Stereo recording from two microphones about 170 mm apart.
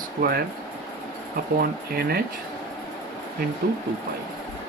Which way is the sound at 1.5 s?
65° right (ahead or behind).